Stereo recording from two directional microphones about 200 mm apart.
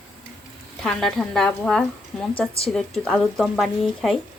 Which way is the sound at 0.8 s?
5° left (ahead or behind).